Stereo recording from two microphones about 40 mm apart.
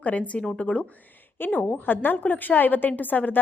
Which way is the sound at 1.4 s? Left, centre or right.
Left.